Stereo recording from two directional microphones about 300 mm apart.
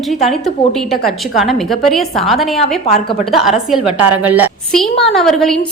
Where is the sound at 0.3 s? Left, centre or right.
Centre.